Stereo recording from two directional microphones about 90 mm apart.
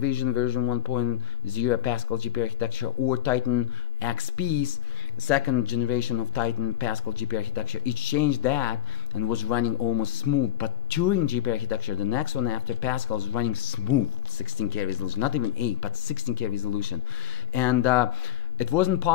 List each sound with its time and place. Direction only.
0.0 s speech: 20° left (ahead or behind)